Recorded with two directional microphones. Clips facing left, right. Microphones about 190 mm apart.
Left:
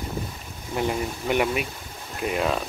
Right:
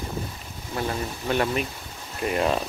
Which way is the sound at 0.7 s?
15° left (ahead or behind).